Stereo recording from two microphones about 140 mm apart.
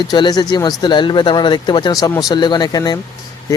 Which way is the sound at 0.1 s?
30° left (ahead or behind).